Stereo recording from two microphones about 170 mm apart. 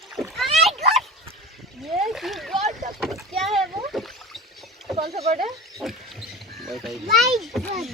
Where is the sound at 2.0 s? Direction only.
Centre (ahead or behind).